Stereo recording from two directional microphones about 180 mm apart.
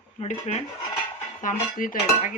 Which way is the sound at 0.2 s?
40° left (ahead or behind).